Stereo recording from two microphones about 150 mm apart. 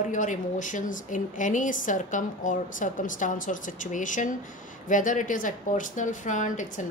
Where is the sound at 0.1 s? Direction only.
55° left (ahead or behind).